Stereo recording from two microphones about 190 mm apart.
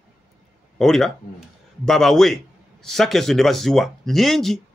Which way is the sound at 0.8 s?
Centre (ahead or behind).